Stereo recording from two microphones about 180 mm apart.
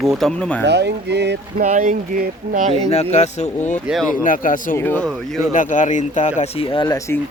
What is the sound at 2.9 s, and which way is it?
Speech, 40° left (ahead or behind).